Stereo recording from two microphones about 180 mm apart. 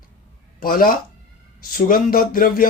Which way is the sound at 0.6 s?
50° left (ahead or behind).